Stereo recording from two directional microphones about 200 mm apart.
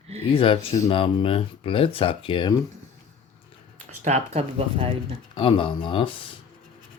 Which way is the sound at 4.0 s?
35° right (ahead or behind).